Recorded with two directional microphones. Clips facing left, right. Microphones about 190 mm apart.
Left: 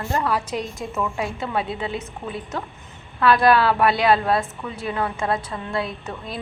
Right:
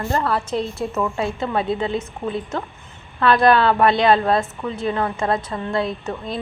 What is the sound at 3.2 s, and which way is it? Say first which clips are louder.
A woman's voice: right 2 dB; 5° left (ahead or behind).